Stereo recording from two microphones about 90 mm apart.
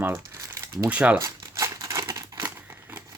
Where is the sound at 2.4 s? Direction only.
25° right (ahead or behind).